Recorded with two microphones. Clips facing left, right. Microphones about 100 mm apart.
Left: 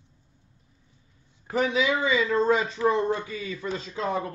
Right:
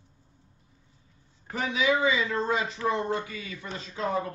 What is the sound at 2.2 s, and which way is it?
A man's voice, 35° left (ahead or behind).